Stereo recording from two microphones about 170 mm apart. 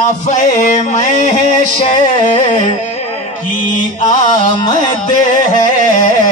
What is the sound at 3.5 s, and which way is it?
Music, 50° left (ahead or behind).